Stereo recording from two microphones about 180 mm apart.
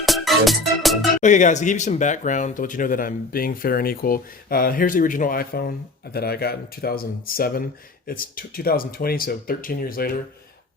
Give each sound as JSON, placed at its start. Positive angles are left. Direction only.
{"t": 0.0, "sound": "music", "side_deg": 0}
{"t": 1.2, "sound": "speech", "side_deg": 40}